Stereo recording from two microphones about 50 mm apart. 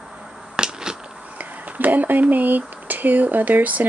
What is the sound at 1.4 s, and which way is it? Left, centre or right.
Speech, right.